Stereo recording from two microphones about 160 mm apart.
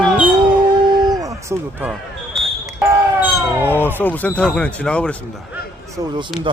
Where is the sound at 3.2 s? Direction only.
10° right (ahead or behind).